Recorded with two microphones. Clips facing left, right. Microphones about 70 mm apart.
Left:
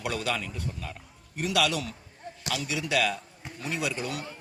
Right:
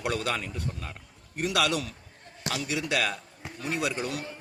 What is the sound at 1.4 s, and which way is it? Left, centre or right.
Speech, right.